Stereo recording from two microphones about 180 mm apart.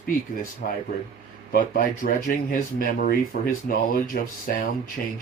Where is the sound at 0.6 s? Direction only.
60° left (ahead or behind).